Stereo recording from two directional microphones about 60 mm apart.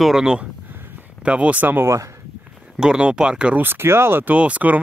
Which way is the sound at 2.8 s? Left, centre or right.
Centre.